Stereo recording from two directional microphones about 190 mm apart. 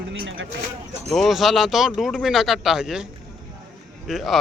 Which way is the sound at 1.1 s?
Centre (ahead or behind).